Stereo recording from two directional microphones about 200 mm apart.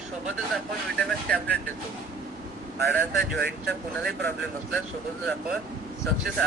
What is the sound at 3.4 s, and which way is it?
Speech, 50° right (ahead or behind).